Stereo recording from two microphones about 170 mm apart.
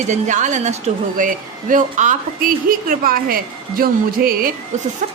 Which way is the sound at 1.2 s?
50° right (ahead or behind).